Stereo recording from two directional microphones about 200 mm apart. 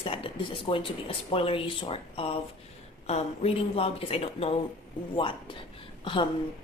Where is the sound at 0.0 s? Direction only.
25° left (ahead or behind).